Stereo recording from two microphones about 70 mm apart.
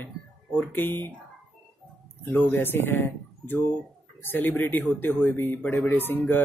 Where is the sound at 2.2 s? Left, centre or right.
Left.